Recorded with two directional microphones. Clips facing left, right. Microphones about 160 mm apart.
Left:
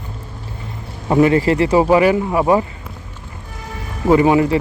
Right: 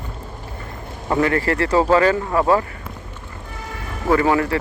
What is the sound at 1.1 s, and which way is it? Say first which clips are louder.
Speech: left 6 dB; 20° left (ahead or behind).